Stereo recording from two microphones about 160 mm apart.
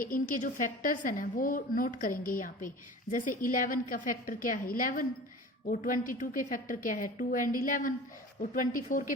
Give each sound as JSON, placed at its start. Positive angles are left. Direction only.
{"t": 0.0, "sound": "a woman's voice", "side_deg": 60}